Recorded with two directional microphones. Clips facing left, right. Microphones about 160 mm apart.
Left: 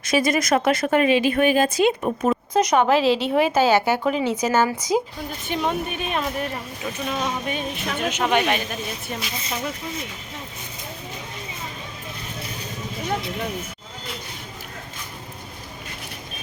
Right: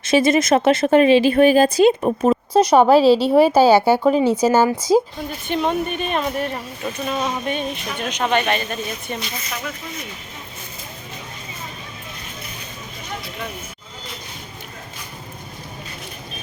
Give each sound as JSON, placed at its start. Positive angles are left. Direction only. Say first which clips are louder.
{"t": 0.0, "sound": "speech", "louder": "right 5 dB", "side_deg": -25}
{"t": 5.1, "sound": "speech", "louder": "right 4 dB", "side_deg": 5}